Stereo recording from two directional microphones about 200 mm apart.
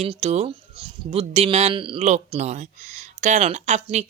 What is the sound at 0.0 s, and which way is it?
Speech, 30° right (ahead or behind).